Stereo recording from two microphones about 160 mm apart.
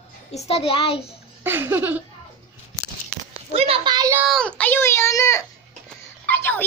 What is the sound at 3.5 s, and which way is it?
Speech, 40° right (ahead or behind).